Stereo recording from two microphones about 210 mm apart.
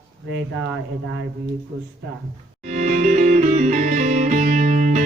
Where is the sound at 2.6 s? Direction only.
35° right (ahead or behind).